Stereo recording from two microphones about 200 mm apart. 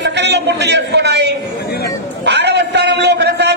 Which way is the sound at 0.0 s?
60° right (ahead or behind).